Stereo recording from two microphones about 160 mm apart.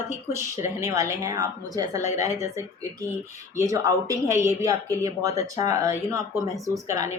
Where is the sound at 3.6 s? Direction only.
20° right (ahead or behind).